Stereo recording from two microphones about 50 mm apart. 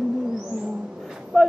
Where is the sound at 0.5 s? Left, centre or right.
Right.